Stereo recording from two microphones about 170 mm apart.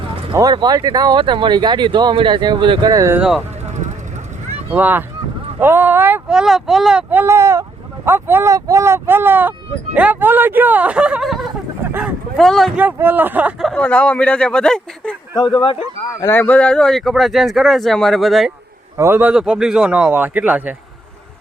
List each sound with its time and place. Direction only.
0.3 s speech: 25° right (ahead or behind)
3.2 s speech: 5° right (ahead or behind)
4.7 s speech: 10° right (ahead or behind)
11.9 s a sound: 10° right (ahead or behind)
12.4 s speech: centre (ahead or behind)
12.8 s speech: 10° right (ahead or behind); by 15.1 s 5° left (ahead or behind)
15.4 s speech: 25° left (ahead or behind)
16.2 s speech: 15° left (ahead or behind)
18.9 s speech: 15° right (ahead or behind)